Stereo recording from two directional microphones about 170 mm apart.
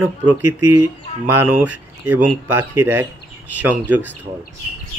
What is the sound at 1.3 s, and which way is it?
Speech, 10° right (ahead or behind).